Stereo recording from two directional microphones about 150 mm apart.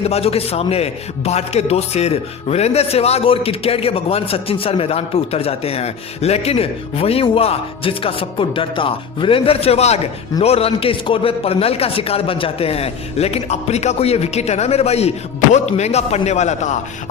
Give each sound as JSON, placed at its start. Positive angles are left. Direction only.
{"t": 0.0, "sound": "a man's voice", "side_deg": 40}